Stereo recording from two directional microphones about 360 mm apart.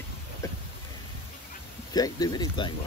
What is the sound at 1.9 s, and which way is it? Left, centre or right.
Speech, centre.